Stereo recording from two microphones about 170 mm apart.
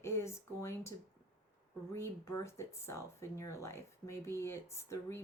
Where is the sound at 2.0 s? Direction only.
15° left (ahead or behind).